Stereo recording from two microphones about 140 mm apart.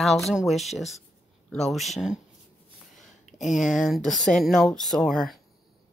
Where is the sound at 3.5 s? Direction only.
Centre (ahead or behind).